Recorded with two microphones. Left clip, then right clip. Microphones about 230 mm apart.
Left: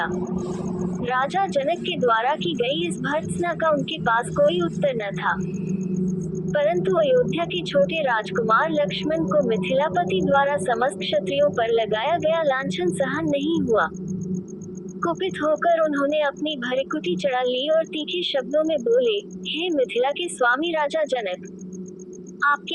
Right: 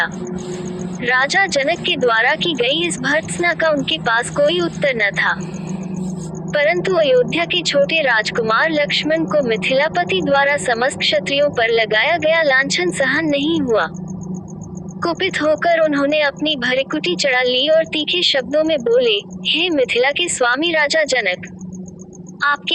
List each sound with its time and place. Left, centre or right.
1.0 s speech: right
6.5 s a woman's voice: right
15.0 s speech: right
22.4 s a sound: right